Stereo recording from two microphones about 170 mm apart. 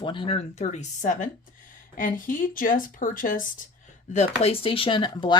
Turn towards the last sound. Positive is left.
turn(degrees=30)  # may be behind; listen again after turning